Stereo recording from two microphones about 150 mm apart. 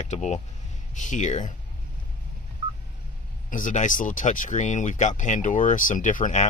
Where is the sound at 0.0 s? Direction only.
50° left (ahead or behind).